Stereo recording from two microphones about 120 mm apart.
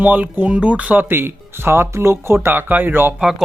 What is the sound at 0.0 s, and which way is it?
Speech, 15° right (ahead or behind).